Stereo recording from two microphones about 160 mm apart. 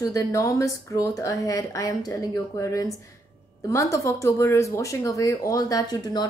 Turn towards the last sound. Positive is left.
turn(degrees=25)  # may be behind; listen again after turning